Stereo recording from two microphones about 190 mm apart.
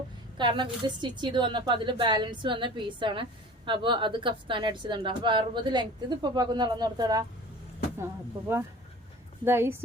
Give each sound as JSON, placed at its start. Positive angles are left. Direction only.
{"t": 0.3, "sound": "a woman's voice", "side_deg": -25}